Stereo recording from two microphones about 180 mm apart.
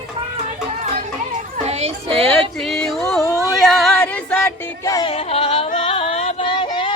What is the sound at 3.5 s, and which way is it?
Music, centre (ahead or behind).